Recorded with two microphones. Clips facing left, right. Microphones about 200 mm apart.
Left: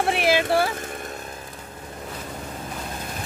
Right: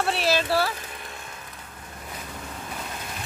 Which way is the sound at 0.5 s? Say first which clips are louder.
Left 3 dB; 15° left (ahead or behind).